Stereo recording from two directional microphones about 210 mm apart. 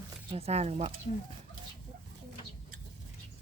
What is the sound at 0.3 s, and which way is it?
Speech, 30° right (ahead or behind).